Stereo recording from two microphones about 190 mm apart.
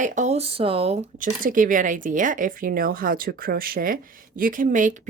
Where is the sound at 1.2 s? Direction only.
45° right (ahead or behind).